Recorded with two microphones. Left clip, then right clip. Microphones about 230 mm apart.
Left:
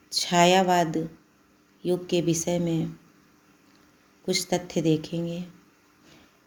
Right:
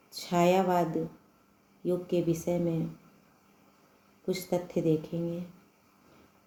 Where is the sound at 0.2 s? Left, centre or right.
Left.